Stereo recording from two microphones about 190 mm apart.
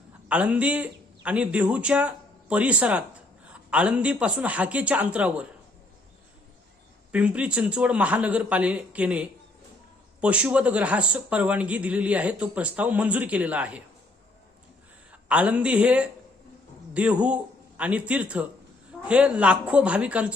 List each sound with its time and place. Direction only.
0.3 s a man's voice: 5° right (ahead or behind)
7.1 s speech: 5° right (ahead or behind)
15.3 s a man's voice: 5° right (ahead or behind)